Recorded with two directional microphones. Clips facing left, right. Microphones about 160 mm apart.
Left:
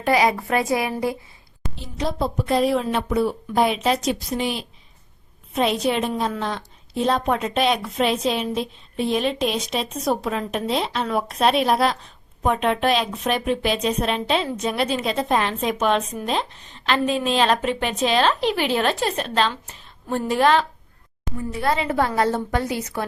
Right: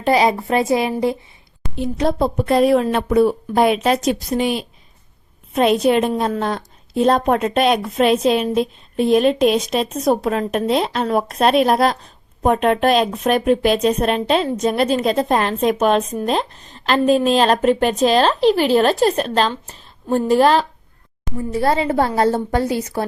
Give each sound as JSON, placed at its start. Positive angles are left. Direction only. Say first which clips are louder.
{"t": 0.0, "sound": "a woman's voice", "louder": "right 3 dB", "side_deg": -25}
{"t": 1.7, "sound": "a woman's voice", "louder": "right 8 dB", "side_deg": -55}